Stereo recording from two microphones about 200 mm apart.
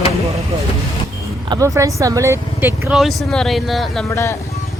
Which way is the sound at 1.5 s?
15° right (ahead or behind).